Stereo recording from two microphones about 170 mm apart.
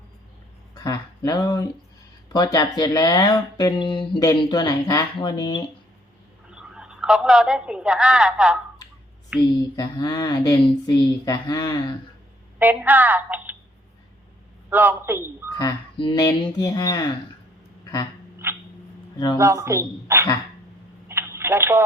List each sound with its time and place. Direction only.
0.7 s speech: 20° left (ahead or behind)
6.5 s a woman's voice: 5° right (ahead or behind)
9.7 s speech: 25° left (ahead or behind)
12.5 s a woman's voice: 10° right (ahead or behind)
14.7 s a woman's voice: 10° right (ahead or behind)
15.5 s speech: 25° left (ahead or behind)
18.4 s a sound: 15° right (ahead or behind)
19.4 s a woman's voice: 15° right (ahead or behind)
21.1 s telephone: 15° right (ahead or behind)